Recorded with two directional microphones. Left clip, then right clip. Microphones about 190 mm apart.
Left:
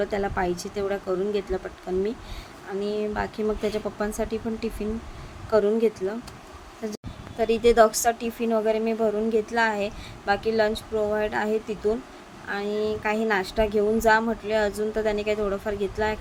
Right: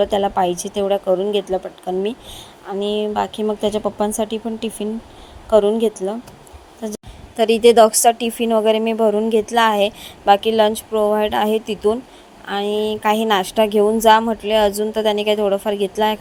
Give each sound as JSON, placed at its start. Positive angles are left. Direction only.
{"t": 0.0, "sound": "a woman's voice", "side_deg": -35}
{"t": 2.6, "sound": "a woman's voice", "side_deg": -30}
{"t": 5.5, "sound": "a woman's voice", "side_deg": -30}